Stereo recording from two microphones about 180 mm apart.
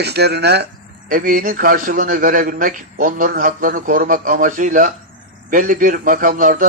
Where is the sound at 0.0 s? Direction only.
65° right (ahead or behind).